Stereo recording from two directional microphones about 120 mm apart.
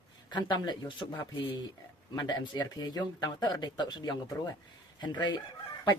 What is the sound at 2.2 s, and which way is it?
Speech, 35° left (ahead or behind).